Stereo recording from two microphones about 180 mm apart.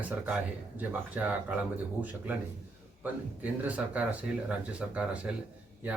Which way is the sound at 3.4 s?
10° right (ahead or behind).